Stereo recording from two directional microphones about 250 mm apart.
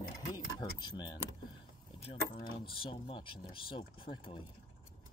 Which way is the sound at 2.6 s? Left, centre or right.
Left.